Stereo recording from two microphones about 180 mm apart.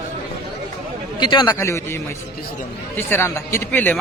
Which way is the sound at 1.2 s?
25° left (ahead or behind).